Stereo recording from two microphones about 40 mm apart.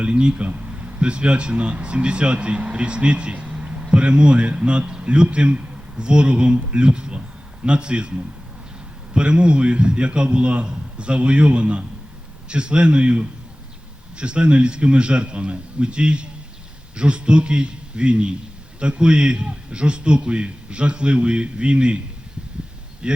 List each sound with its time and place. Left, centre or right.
0.0 s a man's voice: right
0.4 s a man's voice: right
23.0 s speech: right